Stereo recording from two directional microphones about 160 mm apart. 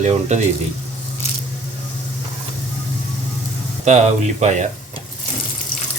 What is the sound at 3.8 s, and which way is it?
Speech, 45° right (ahead or behind).